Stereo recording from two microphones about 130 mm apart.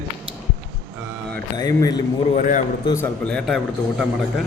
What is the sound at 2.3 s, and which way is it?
Speech, 75° left (ahead or behind).